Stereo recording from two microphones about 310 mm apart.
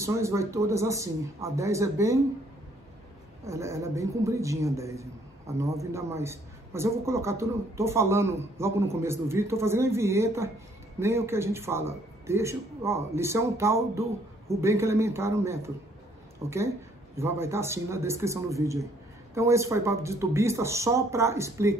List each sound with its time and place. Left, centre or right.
0.0 s a man's voice: centre
3.4 s a man's voice: centre